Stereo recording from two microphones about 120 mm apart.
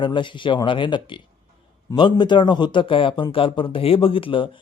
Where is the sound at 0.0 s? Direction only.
40° left (ahead or behind).